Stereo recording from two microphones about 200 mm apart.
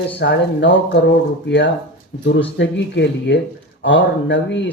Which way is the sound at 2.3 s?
65° left (ahead or behind).